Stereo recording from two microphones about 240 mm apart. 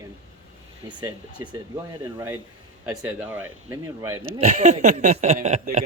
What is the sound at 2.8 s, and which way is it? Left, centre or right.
Speech, centre.